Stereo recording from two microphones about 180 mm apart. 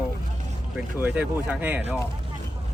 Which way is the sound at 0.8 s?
10° right (ahead or behind).